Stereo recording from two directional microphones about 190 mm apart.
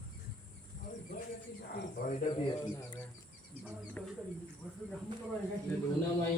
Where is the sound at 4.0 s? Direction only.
5° left (ahead or behind).